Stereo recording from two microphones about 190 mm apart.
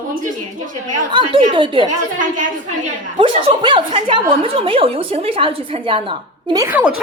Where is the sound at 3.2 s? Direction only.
25° right (ahead or behind).